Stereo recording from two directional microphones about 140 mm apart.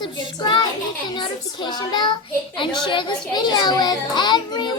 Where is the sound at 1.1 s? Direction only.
35° left (ahead or behind).